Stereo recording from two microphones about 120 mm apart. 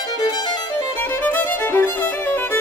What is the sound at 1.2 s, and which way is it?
Music, 15° left (ahead or behind).